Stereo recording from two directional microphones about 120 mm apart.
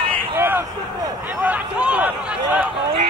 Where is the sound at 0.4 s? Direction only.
20° right (ahead or behind).